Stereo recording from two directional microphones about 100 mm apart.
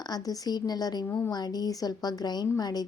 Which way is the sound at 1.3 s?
40° left (ahead or behind).